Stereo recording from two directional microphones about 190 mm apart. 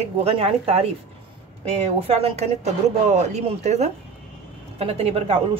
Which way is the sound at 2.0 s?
30° right (ahead or behind).